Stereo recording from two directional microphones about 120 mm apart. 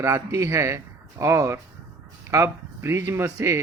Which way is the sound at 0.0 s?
25° right (ahead or behind).